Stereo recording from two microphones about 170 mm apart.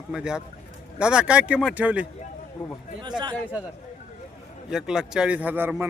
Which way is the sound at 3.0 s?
25° right (ahead or behind).